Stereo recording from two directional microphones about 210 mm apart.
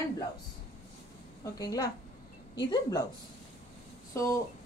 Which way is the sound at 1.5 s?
15° left (ahead or behind).